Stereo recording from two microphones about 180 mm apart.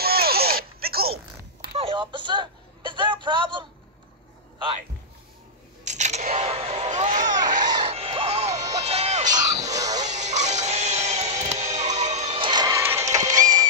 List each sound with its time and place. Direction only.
0.0 s zipper: 60° right (ahead or behind)
1.8 s a sound: 30° right (ahead or behind)
5.9 s single-lens reflex camera: 40° right (ahead or behind)
7.6 s music: 25° right (ahead or behind)
9.8 s a sound: 20° right (ahead or behind)
10.0 s music: 40° right (ahead or behind)
12.4 s music: 25° right (ahead or behind)